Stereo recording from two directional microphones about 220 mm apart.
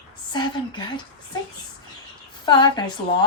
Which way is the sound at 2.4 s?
20° left (ahead or behind).